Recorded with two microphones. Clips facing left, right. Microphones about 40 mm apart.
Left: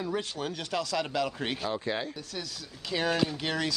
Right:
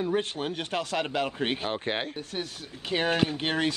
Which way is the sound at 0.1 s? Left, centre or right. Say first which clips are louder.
Right 4 dB; right.